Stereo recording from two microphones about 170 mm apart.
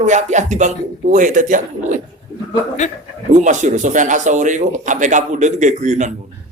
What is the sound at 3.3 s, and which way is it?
Speech, 45° right (ahead or behind).